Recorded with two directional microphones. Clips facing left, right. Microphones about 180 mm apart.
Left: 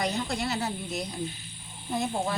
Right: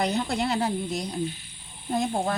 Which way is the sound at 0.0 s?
60° right (ahead or behind).